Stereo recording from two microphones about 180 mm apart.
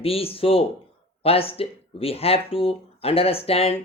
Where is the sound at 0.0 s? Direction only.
30° left (ahead or behind).